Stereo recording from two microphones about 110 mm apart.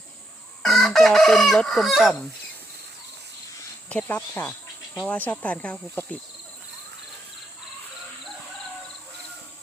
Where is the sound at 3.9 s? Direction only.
15° left (ahead or behind).